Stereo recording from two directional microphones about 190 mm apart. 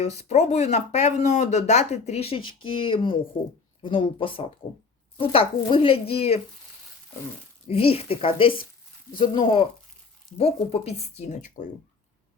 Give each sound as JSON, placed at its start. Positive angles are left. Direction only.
{"t": 0.0, "sound": "speech", "side_deg": 35}
{"t": 7.7, "sound": "speech", "side_deg": 30}